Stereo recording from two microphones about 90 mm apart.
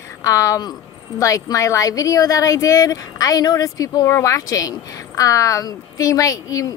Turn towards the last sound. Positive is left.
turn(degrees=40)  # may be behind; listen again after turning